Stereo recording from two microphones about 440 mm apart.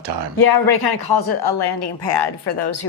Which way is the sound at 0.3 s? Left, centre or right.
Left.